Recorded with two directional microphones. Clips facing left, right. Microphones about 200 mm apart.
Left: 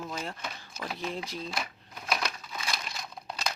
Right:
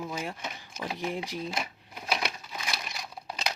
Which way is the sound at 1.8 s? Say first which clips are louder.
Even; 10° right (ahead or behind).